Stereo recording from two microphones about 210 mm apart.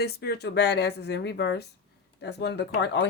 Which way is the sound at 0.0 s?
50° left (ahead or behind).